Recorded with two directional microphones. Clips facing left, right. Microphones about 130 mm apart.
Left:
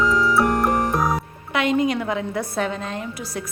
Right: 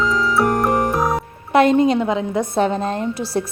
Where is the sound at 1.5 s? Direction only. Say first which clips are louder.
Right 7 dB; 35° right (ahead or behind).